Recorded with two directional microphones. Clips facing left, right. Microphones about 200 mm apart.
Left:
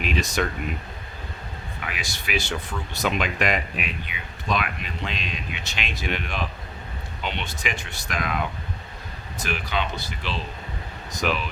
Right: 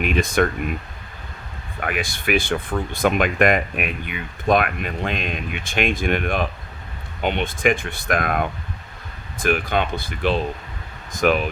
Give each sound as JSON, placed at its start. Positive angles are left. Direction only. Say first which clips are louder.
{"t": 0.0, "sound": "speech", "louder": "right 6 dB", "side_deg": -55}
{"t": 1.8, "sound": "speech", "louder": "right 10 dB", "side_deg": -55}